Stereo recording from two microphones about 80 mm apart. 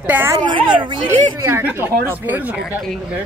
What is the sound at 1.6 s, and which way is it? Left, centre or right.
Speech, right.